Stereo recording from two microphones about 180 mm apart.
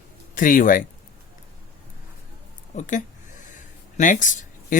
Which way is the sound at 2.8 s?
45° left (ahead or behind).